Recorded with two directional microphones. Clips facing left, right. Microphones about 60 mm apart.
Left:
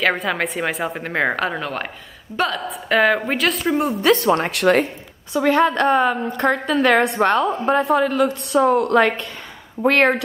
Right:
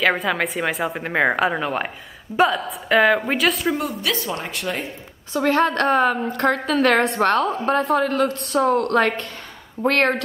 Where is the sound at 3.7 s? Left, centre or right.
Left.